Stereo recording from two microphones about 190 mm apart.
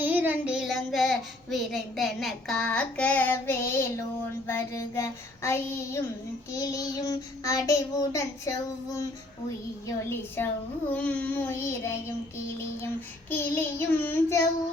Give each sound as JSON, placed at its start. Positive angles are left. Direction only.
{"t": 0.0, "sound": "child singing", "side_deg": -10}
{"t": 13.3, "sound": "child singing", "side_deg": 15}